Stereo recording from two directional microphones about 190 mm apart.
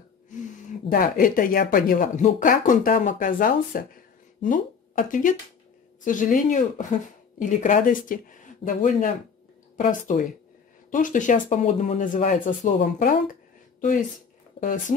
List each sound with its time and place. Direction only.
0.3 s speech: 45° left (ahead or behind)
13.3 s a sound: 45° left (ahead or behind)
14.6 s speech: 40° left (ahead or behind)